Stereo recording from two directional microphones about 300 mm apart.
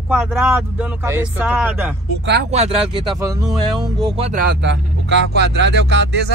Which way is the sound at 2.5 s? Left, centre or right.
Right.